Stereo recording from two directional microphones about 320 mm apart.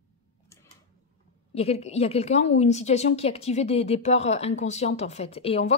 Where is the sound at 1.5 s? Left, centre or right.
Centre.